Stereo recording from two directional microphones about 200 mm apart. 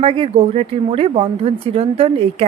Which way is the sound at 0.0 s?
30° right (ahead or behind).